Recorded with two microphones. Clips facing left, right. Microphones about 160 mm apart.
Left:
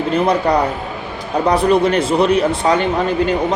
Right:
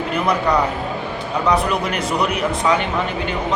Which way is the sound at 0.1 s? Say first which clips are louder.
Left 4 dB; 30° left (ahead or behind).